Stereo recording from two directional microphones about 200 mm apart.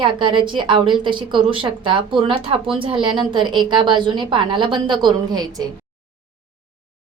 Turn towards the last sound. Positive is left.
turn(degrees=-20)  # may be behind; listen again after turning